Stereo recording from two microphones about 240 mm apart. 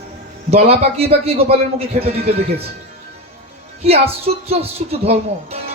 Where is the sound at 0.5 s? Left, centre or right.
Right.